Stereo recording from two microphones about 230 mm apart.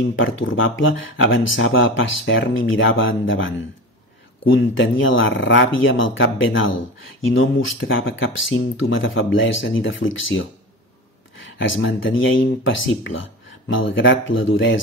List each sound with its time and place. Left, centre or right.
0.1 s speech: left
11.4 s speech: left